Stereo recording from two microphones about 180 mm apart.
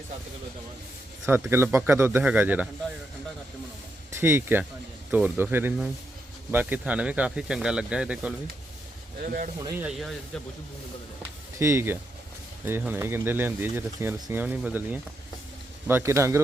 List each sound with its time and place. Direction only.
1.2 s speech: 15° right (ahead or behind)
4.2 s speech: 10° right (ahead or behind)
9.7 s speech: 5° right (ahead or behind)
11.6 s speech: 15° right (ahead or behind)